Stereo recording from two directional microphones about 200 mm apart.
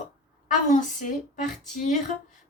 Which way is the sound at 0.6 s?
40° left (ahead or behind).